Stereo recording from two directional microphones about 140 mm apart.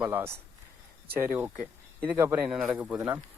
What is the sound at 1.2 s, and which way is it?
Speech, 15° right (ahead or behind).